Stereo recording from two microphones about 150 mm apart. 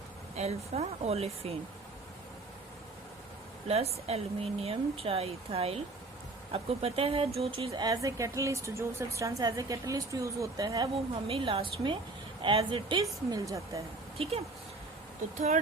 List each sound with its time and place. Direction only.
0.3 s speech: 45° right (ahead or behind)
3.7 s speech: 45° right (ahead or behind)
7.8 s speech: 20° right (ahead or behind)
11.1 s speech: 40° right (ahead or behind); by 13.8 s 20° right (ahead or behind)
14.2 s speech: 40° right (ahead or behind)